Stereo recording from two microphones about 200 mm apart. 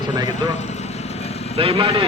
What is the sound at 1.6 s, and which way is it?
Speech, 30° right (ahead or behind).